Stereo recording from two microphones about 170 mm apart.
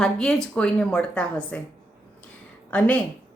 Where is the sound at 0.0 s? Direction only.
5° left (ahead or behind).